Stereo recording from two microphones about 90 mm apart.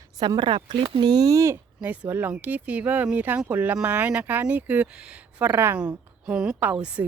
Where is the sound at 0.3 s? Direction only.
70° right (ahead or behind); by 1.5 s 35° right (ahead or behind).